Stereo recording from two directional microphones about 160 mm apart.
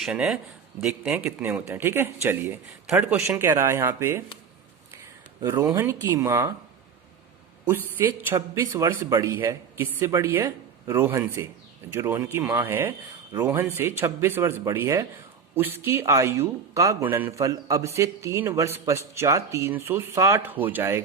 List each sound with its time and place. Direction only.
0.0 s speech: 5° right (ahead or behind)
5.4 s speech: 20° right (ahead or behind)
7.7 s speech: 15° right (ahead or behind)